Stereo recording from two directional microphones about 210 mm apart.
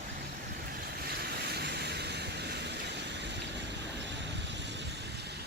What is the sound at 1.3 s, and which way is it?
Vehicle, 50° right (ahead or behind).